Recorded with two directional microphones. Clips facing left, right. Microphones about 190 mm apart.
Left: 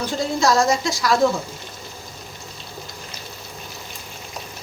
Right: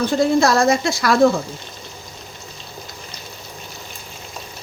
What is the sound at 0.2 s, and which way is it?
Speech, 55° right (ahead or behind).